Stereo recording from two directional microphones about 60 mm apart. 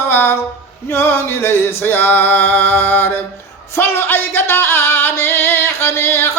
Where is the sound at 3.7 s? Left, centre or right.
Left.